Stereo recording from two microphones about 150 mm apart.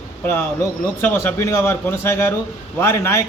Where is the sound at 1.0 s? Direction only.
15° left (ahead or behind).